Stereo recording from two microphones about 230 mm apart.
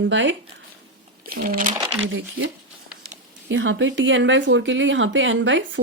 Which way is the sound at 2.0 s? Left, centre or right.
Right.